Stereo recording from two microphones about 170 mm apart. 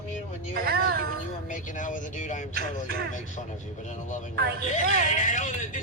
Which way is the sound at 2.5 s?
65° right (ahead or behind).